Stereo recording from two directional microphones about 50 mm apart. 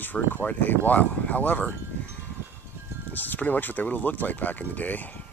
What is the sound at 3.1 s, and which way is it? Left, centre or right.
Speech, left.